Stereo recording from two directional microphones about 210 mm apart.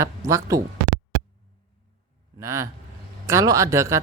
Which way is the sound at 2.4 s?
15° right (ahead or behind).